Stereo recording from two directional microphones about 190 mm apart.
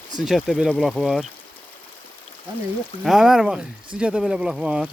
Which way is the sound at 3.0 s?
Centre (ahead or behind).